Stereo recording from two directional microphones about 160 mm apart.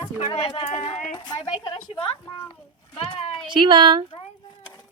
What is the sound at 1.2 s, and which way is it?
Speech, 25° left (ahead or behind).